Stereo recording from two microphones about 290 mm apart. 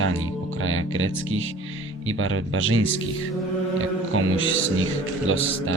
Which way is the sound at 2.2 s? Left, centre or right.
Right.